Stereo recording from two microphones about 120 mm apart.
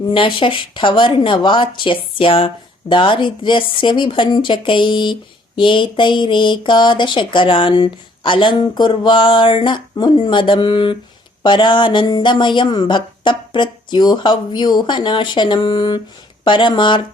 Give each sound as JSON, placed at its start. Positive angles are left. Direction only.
{"t": 0.1, "sound": "speech", "side_deg": 45}